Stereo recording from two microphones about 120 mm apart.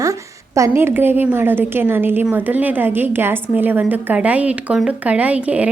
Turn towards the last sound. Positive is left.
turn(degrees=-10)  # may be behind; listen again after turning